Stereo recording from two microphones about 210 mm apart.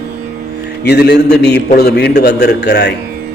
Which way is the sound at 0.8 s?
50° left (ahead or behind).